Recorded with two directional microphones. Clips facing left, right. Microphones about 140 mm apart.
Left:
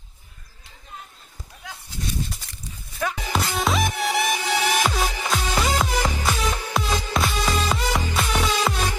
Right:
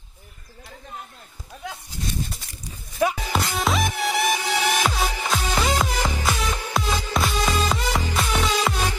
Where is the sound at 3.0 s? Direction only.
15° right (ahead or behind).